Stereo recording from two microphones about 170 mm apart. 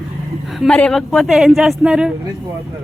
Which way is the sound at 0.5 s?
Centre (ahead or behind).